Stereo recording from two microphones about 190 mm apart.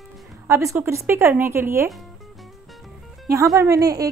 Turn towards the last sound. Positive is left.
turn(degrees=-15)  # may be behind; listen again after turning